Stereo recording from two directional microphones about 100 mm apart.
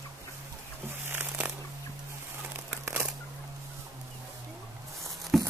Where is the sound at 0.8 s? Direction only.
20° right (ahead or behind).